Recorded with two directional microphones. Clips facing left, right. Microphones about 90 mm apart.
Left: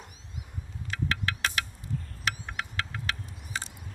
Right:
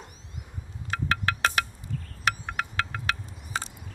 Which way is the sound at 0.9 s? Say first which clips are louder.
Right 4 dB; 50° right (ahead or behind).